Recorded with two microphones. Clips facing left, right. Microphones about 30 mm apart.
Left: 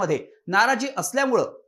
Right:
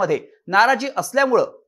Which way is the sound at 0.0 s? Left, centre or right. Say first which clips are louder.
Right 4 dB; right.